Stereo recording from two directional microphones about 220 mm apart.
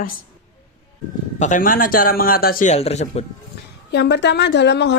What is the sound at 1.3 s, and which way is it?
Speech, 35° left (ahead or behind).